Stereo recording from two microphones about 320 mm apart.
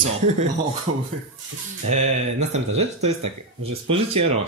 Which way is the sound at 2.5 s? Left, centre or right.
Centre.